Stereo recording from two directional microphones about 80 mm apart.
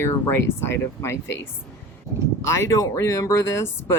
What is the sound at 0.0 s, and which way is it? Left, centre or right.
Speech, left.